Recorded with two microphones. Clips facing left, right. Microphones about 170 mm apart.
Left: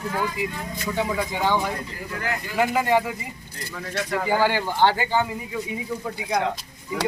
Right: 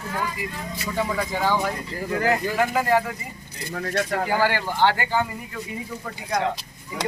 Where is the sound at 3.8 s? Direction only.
50° right (ahead or behind).